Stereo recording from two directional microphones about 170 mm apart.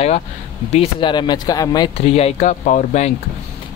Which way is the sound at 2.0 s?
40° left (ahead or behind).